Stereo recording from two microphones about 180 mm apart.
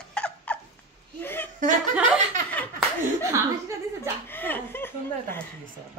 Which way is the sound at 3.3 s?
15° right (ahead or behind).